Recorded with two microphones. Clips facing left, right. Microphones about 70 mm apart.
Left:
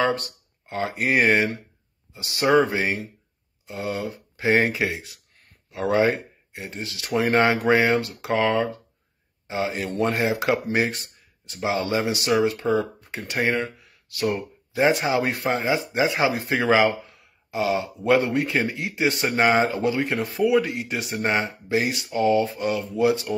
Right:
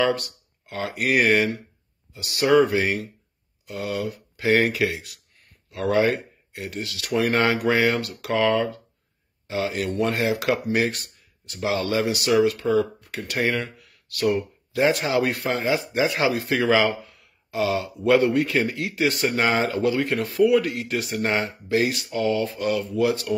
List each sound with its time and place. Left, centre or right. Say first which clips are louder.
0.0 s speech: right 1 dB; left